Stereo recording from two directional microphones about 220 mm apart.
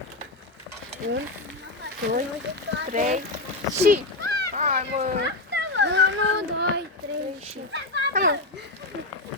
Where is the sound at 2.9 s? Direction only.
35° right (ahead or behind).